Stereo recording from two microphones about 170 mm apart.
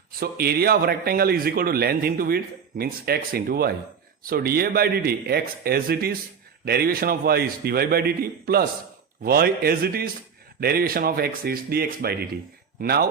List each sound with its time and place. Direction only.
0.2 s speech: 65° right (ahead or behind)